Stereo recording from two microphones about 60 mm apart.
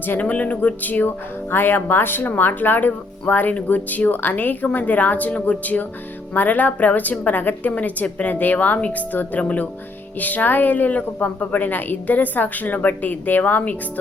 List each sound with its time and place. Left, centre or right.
0.0 s speech: left